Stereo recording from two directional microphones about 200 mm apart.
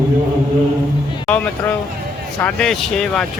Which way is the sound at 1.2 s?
5° left (ahead or behind).